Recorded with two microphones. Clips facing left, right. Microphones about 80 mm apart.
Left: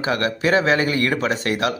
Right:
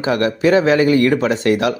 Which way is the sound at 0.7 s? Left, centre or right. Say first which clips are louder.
Right 6 dB; left.